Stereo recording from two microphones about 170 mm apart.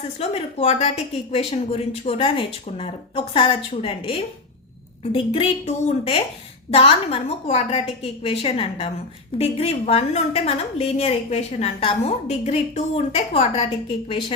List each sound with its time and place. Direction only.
0.2 s a woman's voice: 40° left (ahead or behind)